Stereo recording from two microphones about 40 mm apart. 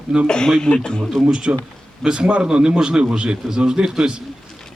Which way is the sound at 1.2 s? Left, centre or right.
Right.